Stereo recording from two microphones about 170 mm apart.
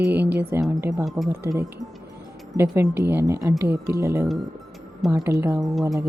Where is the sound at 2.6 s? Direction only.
15° right (ahead or behind).